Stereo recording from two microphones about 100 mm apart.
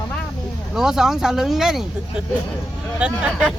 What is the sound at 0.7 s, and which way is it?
Speech, 5° right (ahead or behind).